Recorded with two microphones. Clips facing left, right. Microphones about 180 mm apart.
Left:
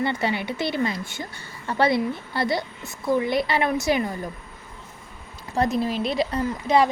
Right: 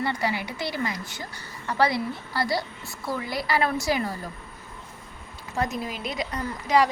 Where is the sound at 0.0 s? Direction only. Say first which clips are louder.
Left 3 dB; 25° left (ahead or behind).